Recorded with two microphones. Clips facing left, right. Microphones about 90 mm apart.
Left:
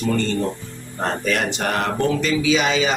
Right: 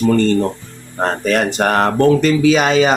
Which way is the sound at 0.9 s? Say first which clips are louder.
Right 6 dB; 45° right (ahead or behind).